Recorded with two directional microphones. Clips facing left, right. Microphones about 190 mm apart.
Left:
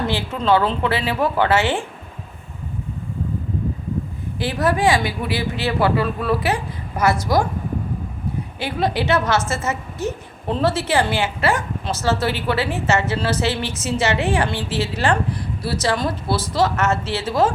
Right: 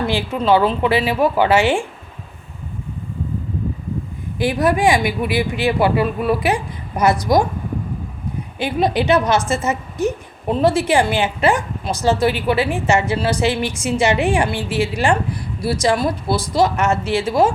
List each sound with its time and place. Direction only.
0.1 s a woman's voice: 15° right (ahead or behind)
4.4 s a woman's voice: 15° right (ahead or behind)
8.5 s a woman's voice: 15° right (ahead or behind)